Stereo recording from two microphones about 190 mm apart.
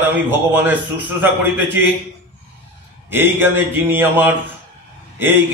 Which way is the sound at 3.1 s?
10° right (ahead or behind).